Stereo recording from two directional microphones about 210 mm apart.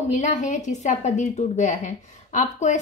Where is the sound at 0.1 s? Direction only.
35° left (ahead or behind).